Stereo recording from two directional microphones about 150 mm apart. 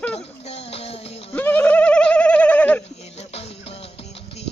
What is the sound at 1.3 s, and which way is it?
Bird, 10° left (ahead or behind).